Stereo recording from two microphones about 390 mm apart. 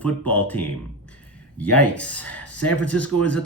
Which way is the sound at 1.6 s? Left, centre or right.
Left.